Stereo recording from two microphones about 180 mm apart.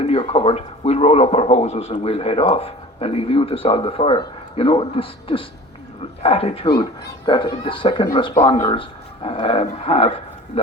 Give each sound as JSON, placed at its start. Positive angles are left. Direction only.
{"t": 0.0, "sound": "a man's voice", "side_deg": 35}